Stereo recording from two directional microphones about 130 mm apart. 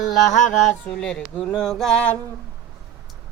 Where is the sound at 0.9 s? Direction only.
5° left (ahead or behind).